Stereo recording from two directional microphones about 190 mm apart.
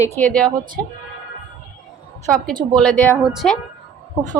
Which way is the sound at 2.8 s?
10° left (ahead or behind).